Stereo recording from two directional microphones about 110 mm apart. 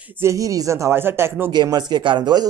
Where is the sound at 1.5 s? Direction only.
40° right (ahead or behind).